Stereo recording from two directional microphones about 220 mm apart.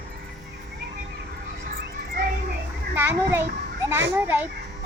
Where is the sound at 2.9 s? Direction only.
10° right (ahead or behind).